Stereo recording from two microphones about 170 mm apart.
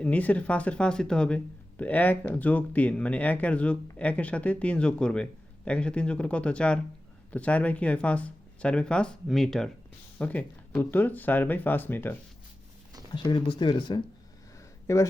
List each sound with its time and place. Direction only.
0.0 s speech: 10° left (ahead or behind)
13.1 s speech: 25° left (ahead or behind)
14.9 s speech: 15° left (ahead or behind)